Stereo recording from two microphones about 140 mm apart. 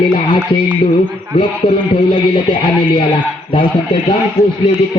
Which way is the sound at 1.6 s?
30° left (ahead or behind).